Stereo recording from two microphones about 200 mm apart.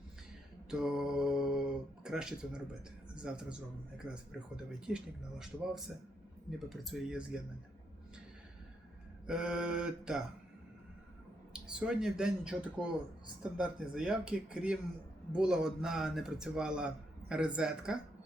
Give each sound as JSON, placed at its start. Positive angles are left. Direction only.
{"t": 0.7, "sound": "mantra", "side_deg": -5}
{"t": 2.0, "sound": "a man's voice", "side_deg": -5}
{"t": 9.2, "sound": "a man's voice", "side_deg": -5}
{"t": 11.5, "sound": "a man's voice", "side_deg": -5}